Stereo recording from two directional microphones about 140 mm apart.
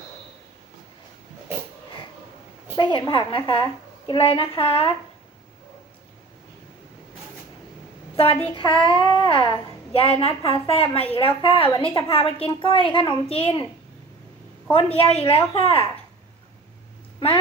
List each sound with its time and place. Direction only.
2.7 s a child's voice: 35° left (ahead or behind)
8.1 s a child's voice: 45° left (ahead or behind)
14.7 s a woman's voice: 45° left (ahead or behind)